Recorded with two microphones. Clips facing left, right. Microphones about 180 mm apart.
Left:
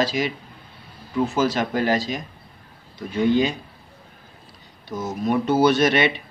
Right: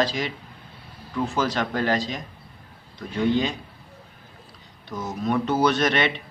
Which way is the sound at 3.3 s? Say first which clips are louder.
Left 5 dB; 5° left (ahead or behind).